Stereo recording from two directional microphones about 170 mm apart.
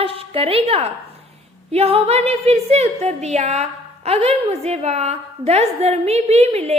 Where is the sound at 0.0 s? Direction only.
35° right (ahead or behind).